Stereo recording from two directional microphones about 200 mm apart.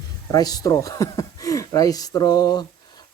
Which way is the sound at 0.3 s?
20° left (ahead or behind).